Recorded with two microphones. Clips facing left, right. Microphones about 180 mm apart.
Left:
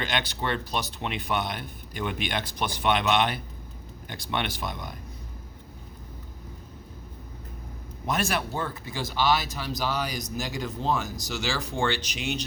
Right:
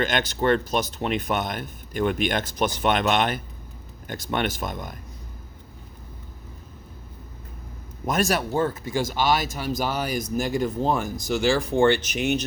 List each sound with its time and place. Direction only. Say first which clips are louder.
0.0 s speech: right 7 dB; 45° right (ahead or behind)
8.0 s speech: right 4 dB; 45° right (ahead or behind)